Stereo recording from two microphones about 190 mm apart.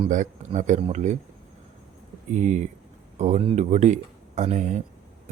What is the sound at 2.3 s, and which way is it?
Speech, 40° right (ahead or behind).